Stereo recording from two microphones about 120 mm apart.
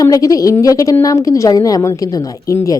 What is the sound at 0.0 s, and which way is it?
A woman's voice, 30° left (ahead or behind).